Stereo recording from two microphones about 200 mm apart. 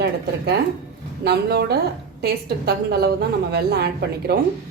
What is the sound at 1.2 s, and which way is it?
Speech, 55° right (ahead or behind).